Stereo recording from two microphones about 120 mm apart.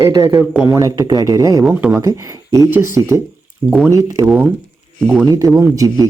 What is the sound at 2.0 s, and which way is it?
Speech, 25° right (ahead or behind).